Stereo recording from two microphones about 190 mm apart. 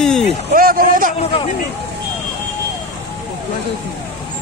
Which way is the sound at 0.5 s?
50° right (ahead or behind).